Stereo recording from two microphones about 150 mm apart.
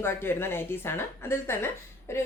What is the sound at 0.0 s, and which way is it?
Speech, 15° left (ahead or behind).